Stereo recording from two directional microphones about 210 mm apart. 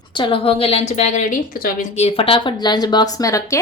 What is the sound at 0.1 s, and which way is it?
A woman's voice, 25° left (ahead or behind).